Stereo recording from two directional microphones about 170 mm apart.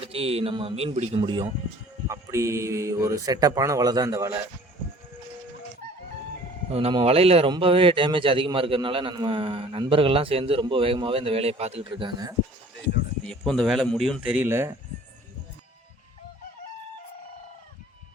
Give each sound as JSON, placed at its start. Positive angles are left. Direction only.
{"t": 0.0, "sound": "a man's voice", "side_deg": -35}
{"t": 2.0, "sound": "speech", "side_deg": -15}
{"t": 6.7, "sound": "a man's voice", "side_deg": -35}
{"t": 13.2, "sound": "speech", "side_deg": 0}